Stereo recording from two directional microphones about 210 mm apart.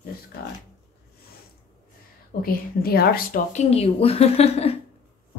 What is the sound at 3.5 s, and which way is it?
A woman's voice, 30° left (ahead or behind).